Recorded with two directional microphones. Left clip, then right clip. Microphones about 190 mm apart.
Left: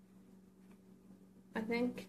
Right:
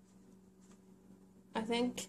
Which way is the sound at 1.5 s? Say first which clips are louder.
Right 2 dB; 35° right (ahead or behind).